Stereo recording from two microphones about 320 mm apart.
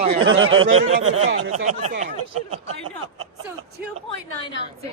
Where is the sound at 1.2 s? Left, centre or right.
Right.